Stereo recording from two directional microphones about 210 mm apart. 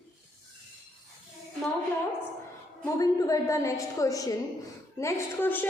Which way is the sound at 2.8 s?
15° left (ahead or behind).